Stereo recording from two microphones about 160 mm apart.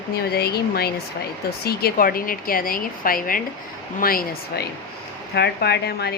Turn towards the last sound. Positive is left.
turn(degrees=90)